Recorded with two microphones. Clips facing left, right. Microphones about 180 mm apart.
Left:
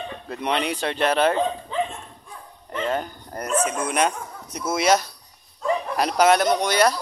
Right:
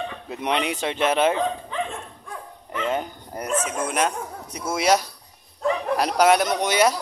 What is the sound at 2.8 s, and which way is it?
Speech, 10° right (ahead or behind).